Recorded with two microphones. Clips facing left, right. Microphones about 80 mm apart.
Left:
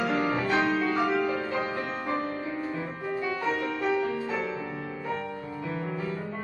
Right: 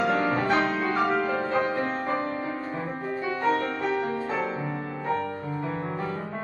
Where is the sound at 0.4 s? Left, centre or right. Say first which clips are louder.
Right 2 dB; right.